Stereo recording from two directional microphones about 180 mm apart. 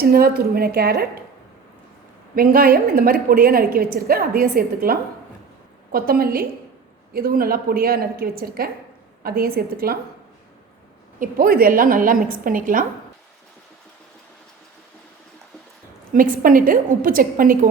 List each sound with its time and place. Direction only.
0.0 s a woman's voice: 55° right (ahead or behind)
2.3 s a woman's voice: 55° right (ahead or behind)
11.2 s a woman's voice: 55° right (ahead or behind)
16.1 s a woman's voice: 50° right (ahead or behind)